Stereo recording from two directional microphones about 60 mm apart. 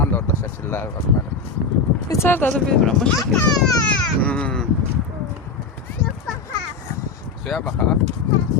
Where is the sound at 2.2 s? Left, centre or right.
Left.